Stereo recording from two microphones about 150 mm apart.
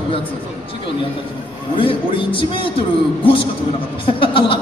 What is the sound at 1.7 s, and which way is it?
Speech, 35° left (ahead or behind).